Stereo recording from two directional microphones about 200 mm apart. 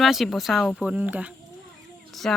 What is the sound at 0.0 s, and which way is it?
Speech, centre (ahead or behind).